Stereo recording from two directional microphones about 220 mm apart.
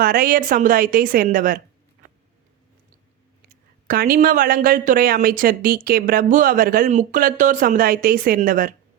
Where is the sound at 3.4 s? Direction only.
40° right (ahead or behind).